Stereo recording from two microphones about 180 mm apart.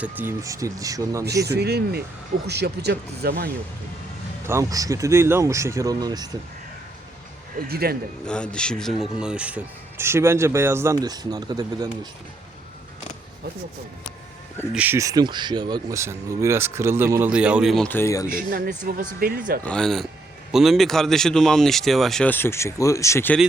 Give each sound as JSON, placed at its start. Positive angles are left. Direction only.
{"t": 0.0, "sound": "speech", "side_deg": -10}
{"t": 1.5, "sound": "speech", "side_deg": -65}
{"t": 4.4, "sound": "speech", "side_deg": -15}
{"t": 7.7, "sound": "speech", "side_deg": -60}
{"t": 8.3, "sound": "speech", "side_deg": 5}
{"t": 14.7, "sound": "speech", "side_deg": -10}
{"t": 17.8, "sound": "speech", "side_deg": 15}
{"t": 18.3, "sound": "speech", "side_deg": -50}
{"t": 19.6, "sound": "speech", "side_deg": 5}